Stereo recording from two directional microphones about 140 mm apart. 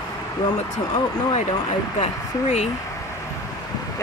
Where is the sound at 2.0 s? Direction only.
55° left (ahead or behind).